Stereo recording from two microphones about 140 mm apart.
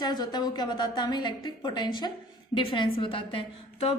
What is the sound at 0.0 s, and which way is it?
A woman's voice, 30° left (ahead or behind).